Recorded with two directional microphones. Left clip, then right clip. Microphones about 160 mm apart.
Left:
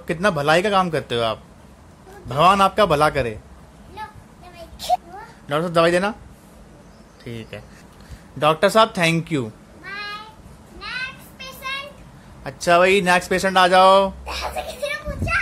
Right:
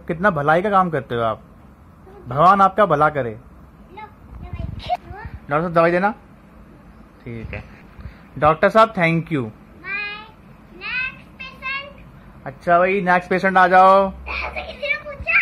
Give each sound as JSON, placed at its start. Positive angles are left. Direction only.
{"t": 0.0, "sound": "speech", "side_deg": 15}
{"t": 4.7, "sound": "a sound", "side_deg": 25}
{"t": 5.5, "sound": "speech", "side_deg": 15}
{"t": 7.2, "sound": "speech", "side_deg": 15}
{"t": 10.8, "sound": "child singing", "side_deg": 20}
{"t": 12.4, "sound": "speech", "side_deg": 30}
{"t": 13.0, "sound": "speech", "side_deg": 15}
{"t": 14.2, "sound": "a sound", "side_deg": 25}